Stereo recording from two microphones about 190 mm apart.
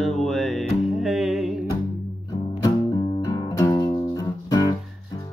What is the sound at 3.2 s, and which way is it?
Music, 20° left (ahead or behind).